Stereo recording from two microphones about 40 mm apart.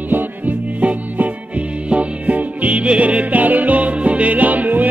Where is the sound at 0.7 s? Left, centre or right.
Right.